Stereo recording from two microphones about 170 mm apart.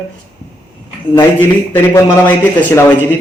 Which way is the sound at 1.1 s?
15° left (ahead or behind).